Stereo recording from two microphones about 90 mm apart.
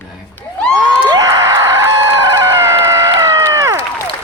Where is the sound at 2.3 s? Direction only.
30° right (ahead or behind).